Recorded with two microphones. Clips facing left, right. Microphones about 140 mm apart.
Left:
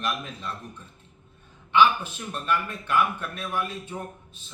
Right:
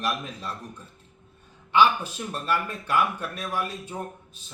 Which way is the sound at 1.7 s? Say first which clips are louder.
Even; 40° right (ahead or behind).